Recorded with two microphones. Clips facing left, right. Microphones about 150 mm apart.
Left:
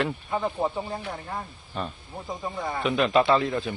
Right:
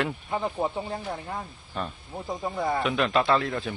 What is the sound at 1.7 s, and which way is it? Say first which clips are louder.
Speech: even; centre (ahead or behind).